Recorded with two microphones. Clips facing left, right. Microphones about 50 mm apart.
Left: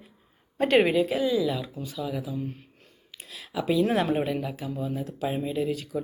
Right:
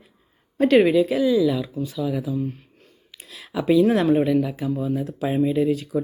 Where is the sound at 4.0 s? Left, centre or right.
Centre.